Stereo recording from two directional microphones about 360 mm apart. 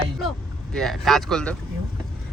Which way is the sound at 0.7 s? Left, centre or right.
Centre.